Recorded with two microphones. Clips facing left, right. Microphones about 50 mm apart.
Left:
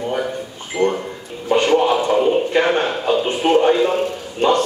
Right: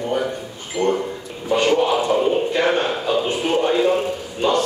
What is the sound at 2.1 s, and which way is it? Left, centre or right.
Speech, centre.